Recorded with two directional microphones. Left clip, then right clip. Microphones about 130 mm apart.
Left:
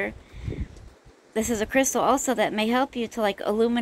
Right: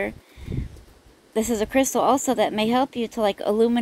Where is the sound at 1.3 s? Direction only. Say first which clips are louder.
Right 2 dB; 35° right (ahead or behind).